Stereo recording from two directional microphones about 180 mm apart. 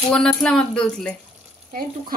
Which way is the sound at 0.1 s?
5° left (ahead or behind).